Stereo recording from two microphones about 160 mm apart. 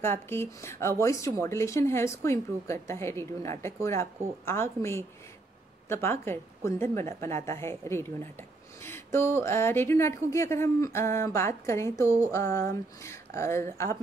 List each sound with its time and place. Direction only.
0.0 s speech: 15° left (ahead or behind)